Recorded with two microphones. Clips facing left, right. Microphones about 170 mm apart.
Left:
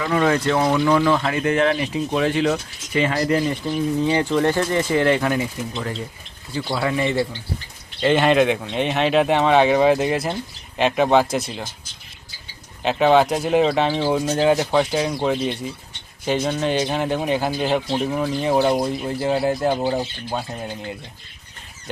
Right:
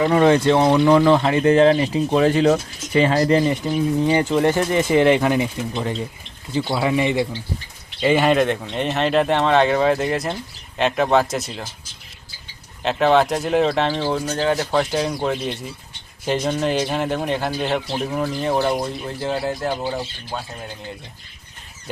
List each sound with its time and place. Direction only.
0.0 s speech: 30° right (ahead or behind)
4.0 s speech: 5° right (ahead or behind)
8.0 s a man's voice: 5° right (ahead or behind)
12.8 s a man's voice: centre (ahead or behind)
14.8 s a man's voice: centre (ahead or behind)
18.5 s speech: 10° left (ahead or behind)